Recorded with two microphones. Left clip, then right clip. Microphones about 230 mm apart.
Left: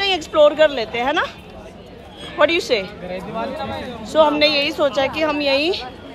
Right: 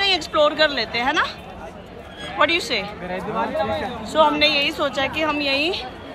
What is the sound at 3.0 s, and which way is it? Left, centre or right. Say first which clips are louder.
Speech: right 1 dB; centre.